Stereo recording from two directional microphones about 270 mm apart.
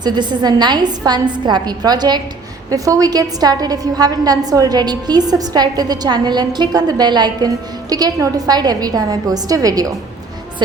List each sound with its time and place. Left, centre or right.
0.0 s a woman's voice: centre